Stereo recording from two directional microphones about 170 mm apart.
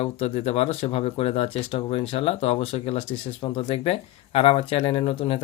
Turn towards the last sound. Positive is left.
turn(degrees=35)  # may be behind; listen again after turning